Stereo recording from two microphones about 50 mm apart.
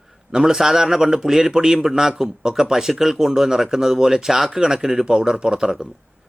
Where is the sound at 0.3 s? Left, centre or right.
Centre.